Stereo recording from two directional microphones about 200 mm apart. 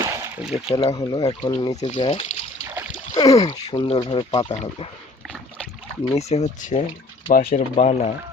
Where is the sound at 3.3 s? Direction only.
25° left (ahead or behind).